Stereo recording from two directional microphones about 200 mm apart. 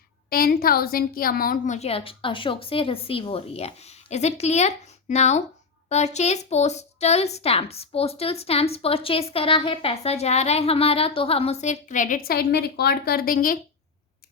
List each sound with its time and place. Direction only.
0.3 s speech: 45° left (ahead or behind)